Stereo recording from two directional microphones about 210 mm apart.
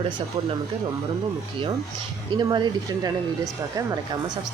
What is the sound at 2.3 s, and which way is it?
A woman's voice, 20° right (ahead or behind).